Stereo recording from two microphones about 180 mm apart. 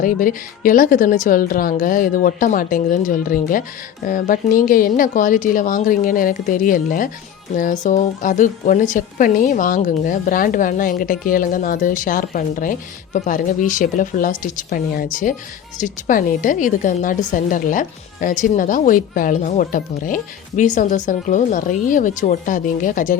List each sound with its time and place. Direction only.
0.0 s a woman's voice: 50° left (ahead or behind)